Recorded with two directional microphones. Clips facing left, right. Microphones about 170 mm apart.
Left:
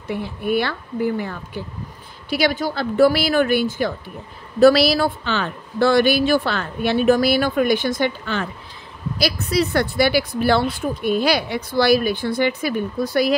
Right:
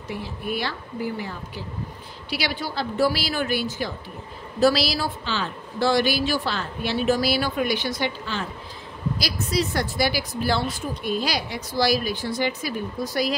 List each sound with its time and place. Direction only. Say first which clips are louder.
0.1 s a woman's voice: left 8 dB; 60° left (ahead or behind)